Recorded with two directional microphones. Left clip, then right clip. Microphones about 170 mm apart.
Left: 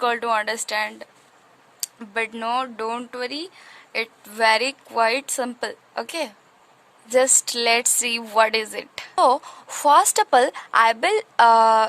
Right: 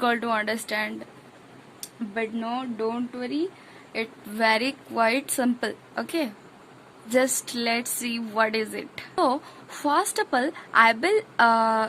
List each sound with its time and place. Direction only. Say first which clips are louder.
0.0 s a woman's voice: left 3 dB; 35° left (ahead or behind)
1.8 s speech: left 4 dB; 50° left (ahead or behind)
3.9 s a woman's voice: left 4 dB; 40° left (ahead or behind)